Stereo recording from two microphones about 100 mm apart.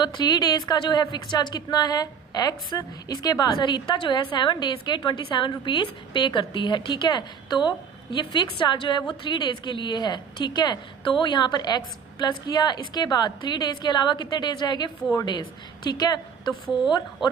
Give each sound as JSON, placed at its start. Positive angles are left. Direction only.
{"t": 0.0, "sound": "a woman's voice", "side_deg": 40}